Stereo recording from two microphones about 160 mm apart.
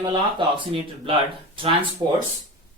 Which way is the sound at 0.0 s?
30° right (ahead or behind).